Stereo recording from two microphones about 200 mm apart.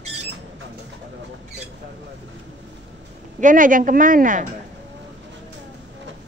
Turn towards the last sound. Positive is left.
turn(degrees=-40)  # may be behind; listen again after turning